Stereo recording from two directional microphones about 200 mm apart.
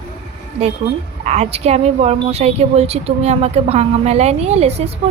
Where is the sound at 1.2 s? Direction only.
30° right (ahead or behind).